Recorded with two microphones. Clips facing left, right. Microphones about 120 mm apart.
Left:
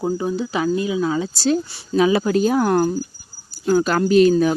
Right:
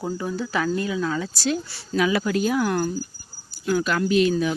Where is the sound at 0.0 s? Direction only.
20° left (ahead or behind); by 3.0 s 50° left (ahead or behind).